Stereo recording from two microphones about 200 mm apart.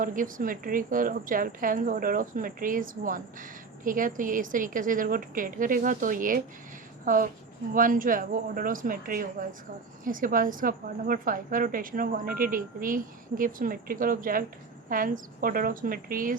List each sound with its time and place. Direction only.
0.0 s a woman's voice: 40° right (ahead or behind)